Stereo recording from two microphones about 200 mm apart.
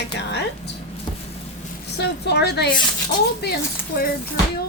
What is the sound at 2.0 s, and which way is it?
A woman's voice, 55° left (ahead or behind).